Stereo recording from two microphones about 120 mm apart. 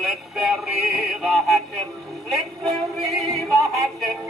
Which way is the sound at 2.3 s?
Centre (ahead or behind).